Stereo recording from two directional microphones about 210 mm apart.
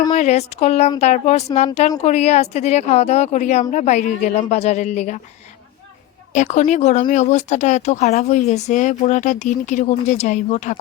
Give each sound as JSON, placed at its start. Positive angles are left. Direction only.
{"t": 0.1, "sound": "speech", "side_deg": 35}
{"t": 6.3, "sound": "speech", "side_deg": 35}